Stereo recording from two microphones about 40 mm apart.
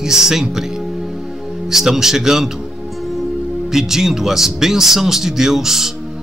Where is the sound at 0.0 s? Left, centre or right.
Centre.